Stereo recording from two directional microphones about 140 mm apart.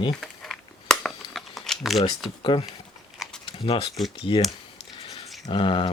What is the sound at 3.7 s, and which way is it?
Speech, 40° left (ahead or behind).